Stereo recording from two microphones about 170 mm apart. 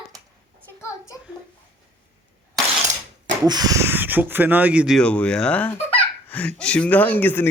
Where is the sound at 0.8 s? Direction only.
15° left (ahead or behind).